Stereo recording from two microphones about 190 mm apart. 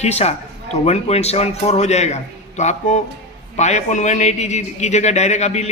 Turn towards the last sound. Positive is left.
turn(degrees=35)  # may be behind; listen again after turning